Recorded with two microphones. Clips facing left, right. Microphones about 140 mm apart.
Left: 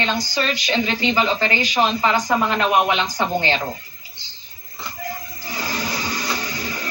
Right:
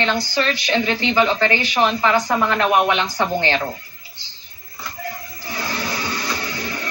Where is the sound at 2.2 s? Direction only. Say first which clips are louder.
Right 1 dB; 15° left (ahead or behind).